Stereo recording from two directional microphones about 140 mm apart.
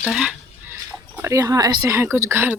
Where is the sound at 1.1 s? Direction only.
20° right (ahead or behind).